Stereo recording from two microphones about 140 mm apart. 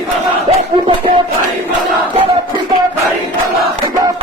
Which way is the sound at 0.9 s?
35° right (ahead or behind).